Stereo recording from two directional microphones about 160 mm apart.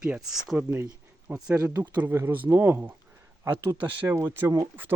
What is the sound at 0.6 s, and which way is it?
Speech, 15° right (ahead or behind).